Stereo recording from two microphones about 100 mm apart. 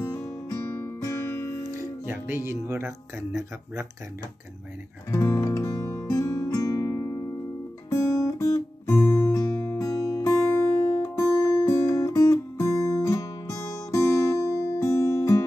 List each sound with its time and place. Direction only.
0.0 s music: 25° left (ahead or behind)
2.0 s speech: 25° right (ahead or behind)
5.1 s music: 30° left (ahead or behind)
7.9 s guitar: 30° left (ahead or behind)
9.1 s music: 35° left (ahead or behind)